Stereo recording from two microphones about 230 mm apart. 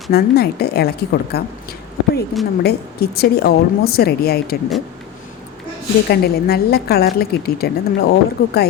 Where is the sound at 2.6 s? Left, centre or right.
Left.